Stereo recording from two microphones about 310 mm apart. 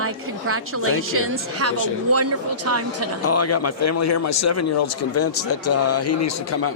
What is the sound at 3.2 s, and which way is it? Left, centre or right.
A man's voice, left.